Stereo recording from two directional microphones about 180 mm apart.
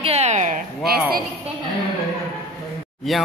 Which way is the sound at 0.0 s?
35° right (ahead or behind).